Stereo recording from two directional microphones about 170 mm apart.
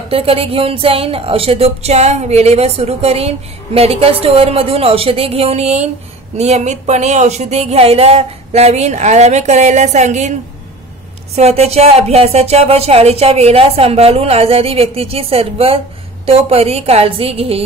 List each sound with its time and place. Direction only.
0.1 s a woman's voice: 35° right (ahead or behind)
11.3 s a woman's voice: 40° right (ahead or behind)